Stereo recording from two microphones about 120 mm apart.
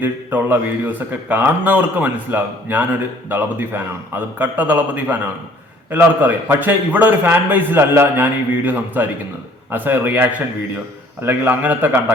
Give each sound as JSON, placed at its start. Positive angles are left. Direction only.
{"t": 0.0, "sound": "a man's voice", "side_deg": -15}